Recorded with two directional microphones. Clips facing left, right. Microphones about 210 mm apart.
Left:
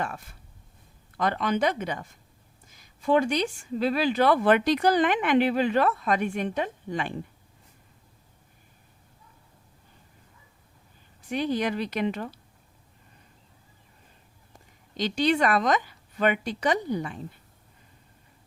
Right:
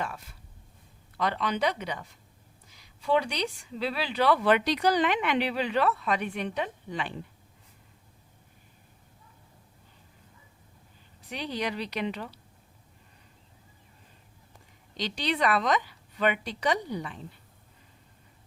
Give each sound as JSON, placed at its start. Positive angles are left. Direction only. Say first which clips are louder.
{"t": 0.0, "sound": "a woman's voice", "louder": "left 3 dB", "side_deg": 50}
{"t": 11.2, "sound": "a woman's voice", "louder": "left 6 dB", "side_deg": 50}
{"t": 14.9, "sound": "a woman's voice", "louder": "left 6 dB", "side_deg": 45}